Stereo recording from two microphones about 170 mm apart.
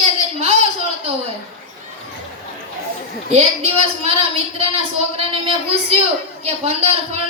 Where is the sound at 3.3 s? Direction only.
35° right (ahead or behind).